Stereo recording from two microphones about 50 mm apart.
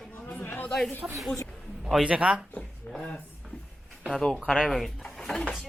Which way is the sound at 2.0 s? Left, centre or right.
Right.